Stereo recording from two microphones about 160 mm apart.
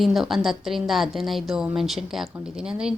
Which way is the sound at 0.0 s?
Centre (ahead or behind).